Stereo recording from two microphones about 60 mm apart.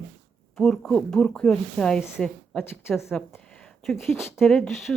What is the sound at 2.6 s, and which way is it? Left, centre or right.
Speech, left.